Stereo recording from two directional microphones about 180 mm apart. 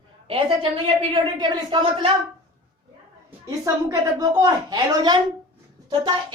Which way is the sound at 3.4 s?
20° right (ahead or behind).